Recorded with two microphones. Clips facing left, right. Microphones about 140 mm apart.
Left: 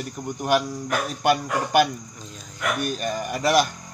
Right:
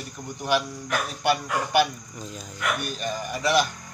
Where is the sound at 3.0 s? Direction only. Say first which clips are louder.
Left 3 dB; 45° left (ahead or behind).